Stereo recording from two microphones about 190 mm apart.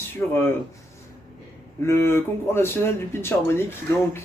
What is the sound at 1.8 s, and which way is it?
Speech, 15° left (ahead or behind).